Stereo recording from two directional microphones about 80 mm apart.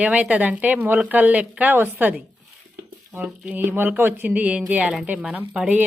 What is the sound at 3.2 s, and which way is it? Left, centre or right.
Speech, centre.